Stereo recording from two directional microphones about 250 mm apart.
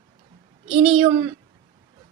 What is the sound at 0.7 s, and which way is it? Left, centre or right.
Speech, right.